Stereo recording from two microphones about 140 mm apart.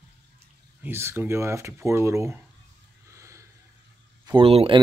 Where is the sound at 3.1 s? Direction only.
20° right (ahead or behind).